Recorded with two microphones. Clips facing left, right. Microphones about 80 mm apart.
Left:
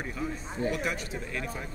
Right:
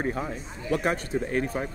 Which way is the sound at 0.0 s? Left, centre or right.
Right.